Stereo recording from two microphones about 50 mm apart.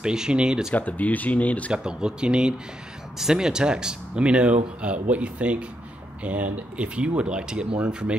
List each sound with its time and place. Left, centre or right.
0.0 s speech: centre
0.7 s speech: left
1.7 s speech: centre